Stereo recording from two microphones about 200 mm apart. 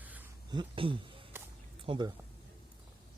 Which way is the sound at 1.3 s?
10° right (ahead or behind).